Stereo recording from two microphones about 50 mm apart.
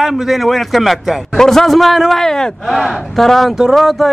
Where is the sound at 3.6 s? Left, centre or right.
Centre.